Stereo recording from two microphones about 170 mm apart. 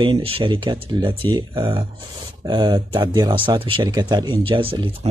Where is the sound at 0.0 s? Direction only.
30° right (ahead or behind).